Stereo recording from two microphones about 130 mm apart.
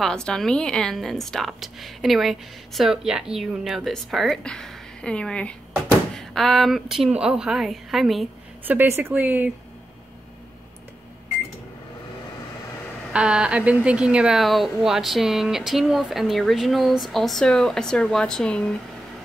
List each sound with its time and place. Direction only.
0.0 s a woman's voice: 5° left (ahead or behind)
8.6 s a woman's voice: 15° right (ahead or behind)
13.1 s a woman's voice: 5° right (ahead or behind)